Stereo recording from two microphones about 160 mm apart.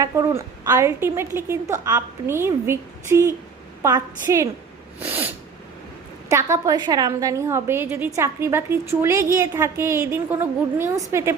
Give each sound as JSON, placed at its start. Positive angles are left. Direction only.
{"t": 0.0, "sound": "a woman's voice", "side_deg": -20}
{"t": 4.9, "sound": "sneeze", "side_deg": -10}
{"t": 6.3, "sound": "a woman's voice", "side_deg": -20}